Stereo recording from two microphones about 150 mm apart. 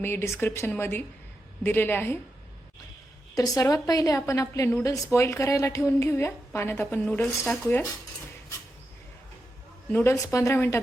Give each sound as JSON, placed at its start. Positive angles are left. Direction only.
{"t": 0.0, "sound": "speech", "side_deg": 15}
{"t": 3.3, "sound": "a woman's voice", "side_deg": 25}
{"t": 9.9, "sound": "speech", "side_deg": 15}